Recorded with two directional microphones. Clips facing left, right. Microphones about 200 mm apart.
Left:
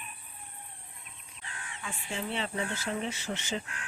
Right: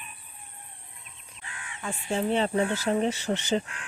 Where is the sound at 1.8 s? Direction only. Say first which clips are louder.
Right 9 dB; 45° right (ahead or behind).